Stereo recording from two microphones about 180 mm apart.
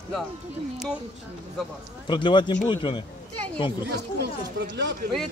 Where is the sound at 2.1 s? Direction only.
25° left (ahead or behind).